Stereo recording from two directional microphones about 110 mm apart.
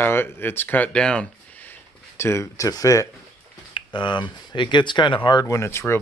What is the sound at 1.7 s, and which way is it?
Speech, 20° left (ahead or behind).